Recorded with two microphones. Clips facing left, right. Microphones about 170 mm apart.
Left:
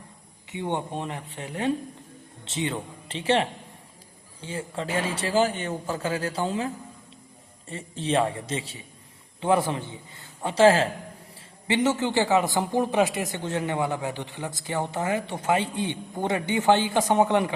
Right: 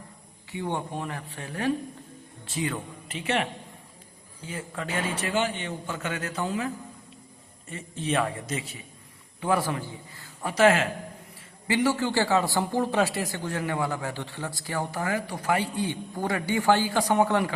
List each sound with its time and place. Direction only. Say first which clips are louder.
0.5 s a man's voice: left 2 dB; 20° left (ahead or behind)
7.7 s a man's voice: left 2 dB; 30° left (ahead or behind)